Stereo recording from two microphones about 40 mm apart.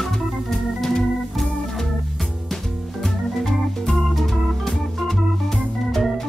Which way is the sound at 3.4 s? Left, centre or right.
Centre.